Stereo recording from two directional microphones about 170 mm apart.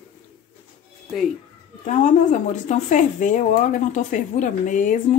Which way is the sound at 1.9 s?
45° left (ahead or behind).